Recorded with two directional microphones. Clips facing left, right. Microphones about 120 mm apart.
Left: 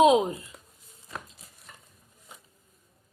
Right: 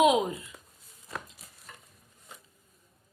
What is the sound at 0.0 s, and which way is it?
Speech, 30° left (ahead or behind).